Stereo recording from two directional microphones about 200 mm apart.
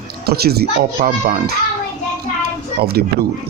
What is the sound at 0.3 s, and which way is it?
A man's voice, 50° right (ahead or behind).